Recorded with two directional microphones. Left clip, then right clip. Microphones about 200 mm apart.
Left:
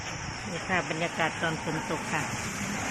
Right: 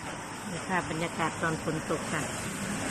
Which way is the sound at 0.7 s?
Centre (ahead or behind).